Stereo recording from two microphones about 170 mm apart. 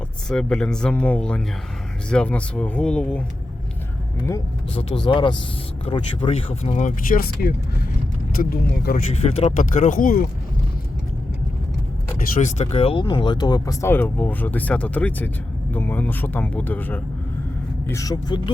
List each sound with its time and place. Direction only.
0.3 s speech: 5° left (ahead or behind)
4.7 s speech: 35° left (ahead or behind); by 9.0 s 60° left (ahead or behind)
9.2 s speech: 35° left (ahead or behind)
9.6 s speech: 50° left (ahead or behind)
12.4 s speech: 40° left (ahead or behind); by 18.5 s 25° left (ahead or behind)